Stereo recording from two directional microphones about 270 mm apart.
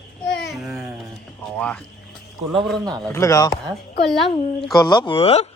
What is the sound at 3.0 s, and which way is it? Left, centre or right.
A man's voice, centre.